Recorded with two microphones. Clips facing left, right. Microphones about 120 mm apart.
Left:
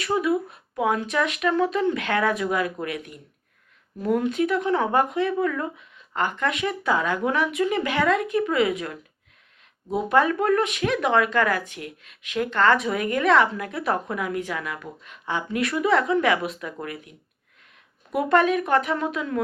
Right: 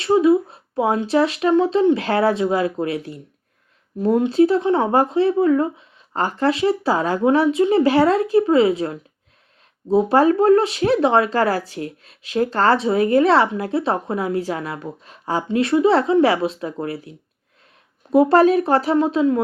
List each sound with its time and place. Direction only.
0.0 s speech: 25° right (ahead or behind)